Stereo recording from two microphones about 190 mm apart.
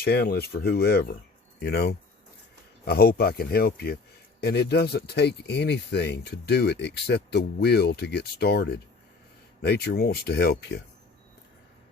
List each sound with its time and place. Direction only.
0.0 s speech: 55° left (ahead or behind)